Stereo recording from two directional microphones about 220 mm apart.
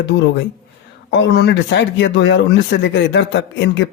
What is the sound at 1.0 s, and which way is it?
Speech, 55° left (ahead or behind).